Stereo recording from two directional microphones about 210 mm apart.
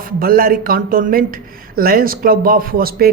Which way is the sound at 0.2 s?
45° right (ahead or behind).